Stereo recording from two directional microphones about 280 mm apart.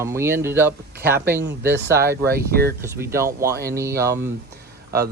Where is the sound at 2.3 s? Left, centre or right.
Right.